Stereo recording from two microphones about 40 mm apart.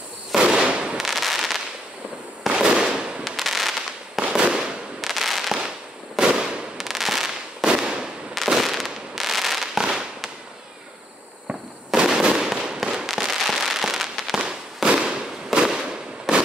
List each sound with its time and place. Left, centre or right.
0.4 s fireworks: right
0.9 s fireworks: centre
2.5 s fireworks: right
3.3 s fireworks: centre
4.2 s fireworks: right
5.0 s fireworks: centre
6.1 s fireworks: right
6.8 s fireworks: centre
7.6 s fireworks: right
8.5 s fireworks: centre
12.0 s fireworks: centre
12.8 s fireworks: centre